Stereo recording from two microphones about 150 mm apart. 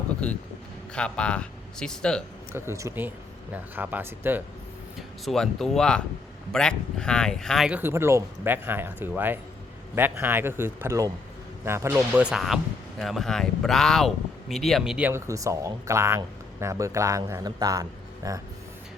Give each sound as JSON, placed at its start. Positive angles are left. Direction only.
{"t": 0.2, "sound": "a man's voice", "side_deg": 5}
{"t": 2.5, "sound": "speech", "side_deg": -15}
{"t": 4.9, "sound": "speech", "side_deg": 0}
{"t": 7.7, "sound": "speech", "side_deg": -15}
{"t": 15.3, "sound": "speech", "side_deg": -20}